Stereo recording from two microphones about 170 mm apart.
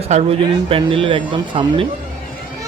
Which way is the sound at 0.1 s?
40° right (ahead or behind).